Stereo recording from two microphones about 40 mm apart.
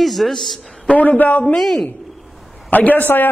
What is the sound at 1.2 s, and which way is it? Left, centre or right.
Speech, left.